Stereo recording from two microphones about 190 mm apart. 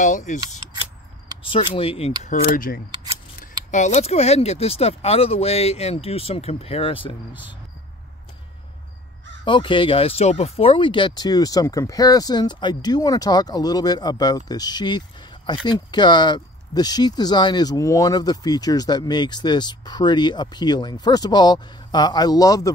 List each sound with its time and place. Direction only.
0.0 s speech: 40° left (ahead or behind)
1.4 s speech: 30° left (ahead or behind)
2.4 s speech: 50° left (ahead or behind)
2.9 s camera: 20° right (ahead or behind)
3.7 s speech: 35° left (ahead or behind)
9.4 s speech: 25° left (ahead or behind)